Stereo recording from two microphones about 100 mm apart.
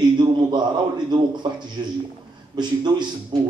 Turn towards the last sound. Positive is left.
turn(degrees=-45)  # may be behind; listen again after turning